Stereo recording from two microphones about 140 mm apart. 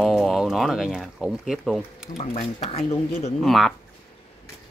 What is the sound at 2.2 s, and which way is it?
Speech, 50° left (ahead or behind).